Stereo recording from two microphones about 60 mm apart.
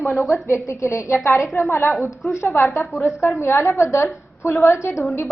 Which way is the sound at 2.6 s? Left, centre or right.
Centre.